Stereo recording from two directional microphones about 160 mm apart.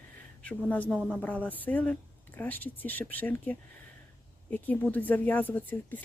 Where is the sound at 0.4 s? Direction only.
10° left (ahead or behind).